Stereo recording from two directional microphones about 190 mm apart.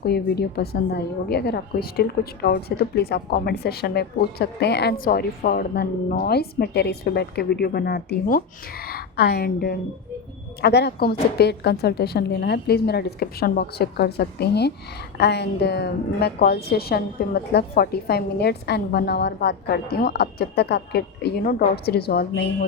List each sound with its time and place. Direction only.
0.0 s a woman's voice: 55° left (ahead or behind)